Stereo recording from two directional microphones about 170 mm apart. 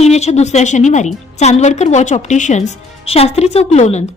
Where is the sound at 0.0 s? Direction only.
40° left (ahead or behind).